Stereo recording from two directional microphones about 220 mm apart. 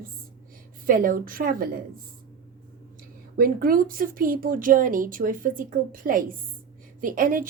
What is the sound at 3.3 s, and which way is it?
Speech, 40° right (ahead or behind).